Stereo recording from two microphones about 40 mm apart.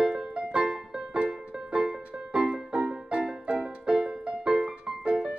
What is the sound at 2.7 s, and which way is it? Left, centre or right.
Music, right.